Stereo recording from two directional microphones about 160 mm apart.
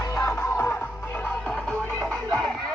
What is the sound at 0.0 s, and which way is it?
Music, 15° left (ahead or behind).